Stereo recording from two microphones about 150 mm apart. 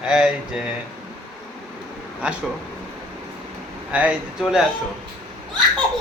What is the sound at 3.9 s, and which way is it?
Speech, 10° right (ahead or behind).